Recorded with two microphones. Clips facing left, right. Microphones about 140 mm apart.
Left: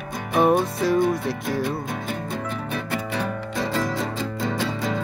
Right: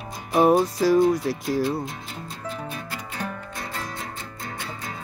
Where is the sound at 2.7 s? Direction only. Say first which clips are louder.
Left 8 dB; 80° left.